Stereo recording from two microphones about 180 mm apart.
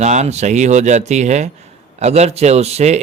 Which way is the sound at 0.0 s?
40° right (ahead or behind).